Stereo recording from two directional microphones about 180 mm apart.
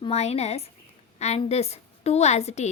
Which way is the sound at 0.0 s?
35° left (ahead or behind).